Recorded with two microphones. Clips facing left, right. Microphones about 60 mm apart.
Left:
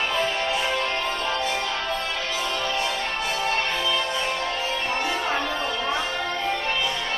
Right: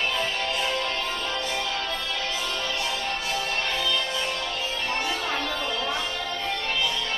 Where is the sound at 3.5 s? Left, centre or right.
Left.